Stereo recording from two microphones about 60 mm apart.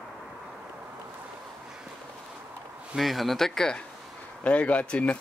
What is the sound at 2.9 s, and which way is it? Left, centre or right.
Speech, centre.